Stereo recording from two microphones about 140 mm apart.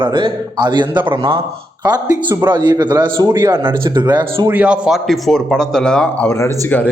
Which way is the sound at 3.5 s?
35° right (ahead or behind).